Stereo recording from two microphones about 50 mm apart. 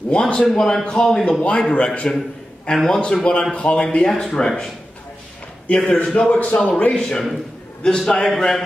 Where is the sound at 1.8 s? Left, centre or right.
Left.